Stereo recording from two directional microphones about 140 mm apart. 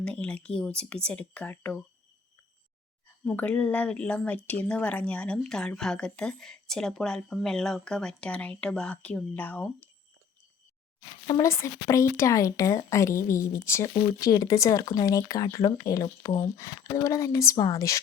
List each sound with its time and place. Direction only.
0.0 s speech: 10° left (ahead or behind)
3.2 s speech: 10° left (ahead or behind)
11.3 s a woman's voice: 20° left (ahead or behind)